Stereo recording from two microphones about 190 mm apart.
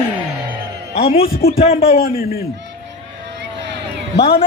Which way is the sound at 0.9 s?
30° left (ahead or behind).